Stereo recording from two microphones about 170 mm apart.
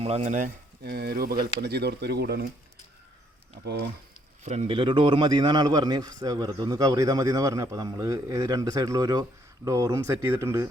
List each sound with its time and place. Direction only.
0.0 s speech: 40° right (ahead or behind)
0.9 s speech: 70° right (ahead or behind)
4.4 s a man's voice: 35° right (ahead or behind); by 10.7 s 15° right (ahead or behind)